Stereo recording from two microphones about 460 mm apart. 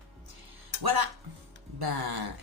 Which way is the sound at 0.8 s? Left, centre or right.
Right.